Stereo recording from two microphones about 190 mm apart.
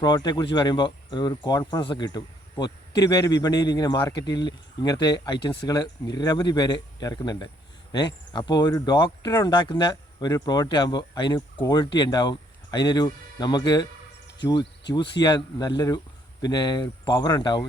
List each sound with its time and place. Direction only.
0.0 s speech: 20° left (ahead or behind)
14.3 s insect: 25° left (ahead or behind)
15.2 s speech: 20° left (ahead or behind)